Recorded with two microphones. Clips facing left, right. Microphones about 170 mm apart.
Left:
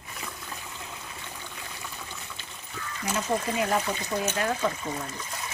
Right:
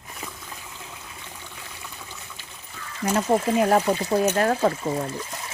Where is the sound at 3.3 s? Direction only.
40° right (ahead or behind).